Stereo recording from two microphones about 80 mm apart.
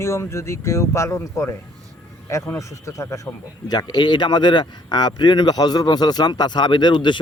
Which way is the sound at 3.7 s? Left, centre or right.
Left.